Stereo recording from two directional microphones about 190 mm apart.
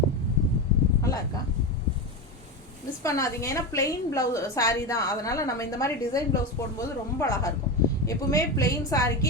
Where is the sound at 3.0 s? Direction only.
15° left (ahead or behind).